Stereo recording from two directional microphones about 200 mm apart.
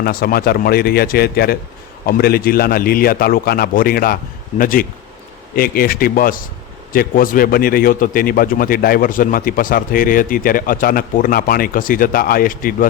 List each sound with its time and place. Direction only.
0.0 s a man's voice: 50° left (ahead or behind)